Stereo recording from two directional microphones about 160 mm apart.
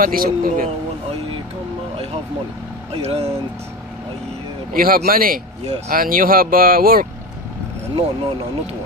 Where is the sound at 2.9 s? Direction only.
40° right (ahead or behind).